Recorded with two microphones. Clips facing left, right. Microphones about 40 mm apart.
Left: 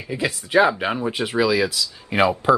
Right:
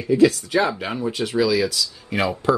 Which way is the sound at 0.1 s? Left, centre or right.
Centre.